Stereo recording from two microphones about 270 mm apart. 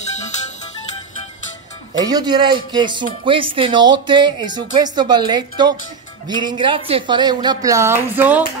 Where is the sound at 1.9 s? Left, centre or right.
Centre.